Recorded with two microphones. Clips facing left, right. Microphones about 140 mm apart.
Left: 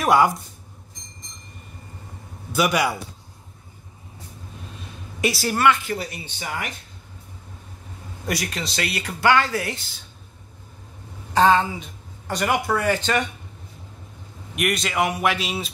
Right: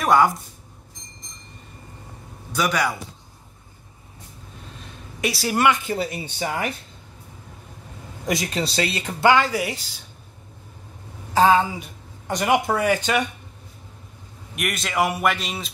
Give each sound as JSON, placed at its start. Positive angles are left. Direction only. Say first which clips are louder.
{"t": 0.0, "sound": "speech", "louder": "even", "side_deg": 5}
{"t": 2.5, "sound": "a man's voice", "louder": "left 2 dB", "side_deg": 10}
{"t": 5.2, "sound": "a man's voice", "louder": "left 1 dB", "side_deg": 0}
{"t": 5.6, "sound": "speech", "louder": "even", "side_deg": -20}
{"t": 8.3, "sound": "speech", "louder": "right 3 dB", "side_deg": -25}
{"t": 11.3, "sound": "a man's voice", "louder": "even", "side_deg": -5}
{"t": 12.3, "sound": "speech", "louder": "right 2 dB", "side_deg": -20}
{"t": 14.5, "sound": "a man's voice", "louder": "left 3 dB", "side_deg": 0}